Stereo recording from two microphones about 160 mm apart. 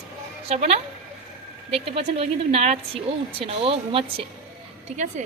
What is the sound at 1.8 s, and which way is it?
Speech, 40° right (ahead or behind).